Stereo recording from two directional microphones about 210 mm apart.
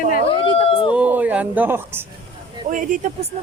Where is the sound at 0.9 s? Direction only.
5° right (ahead or behind).